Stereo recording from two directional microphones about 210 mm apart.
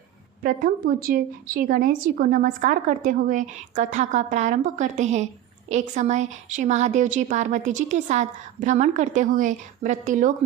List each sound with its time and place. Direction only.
0.4 s a woman's voice: 40° right (ahead or behind)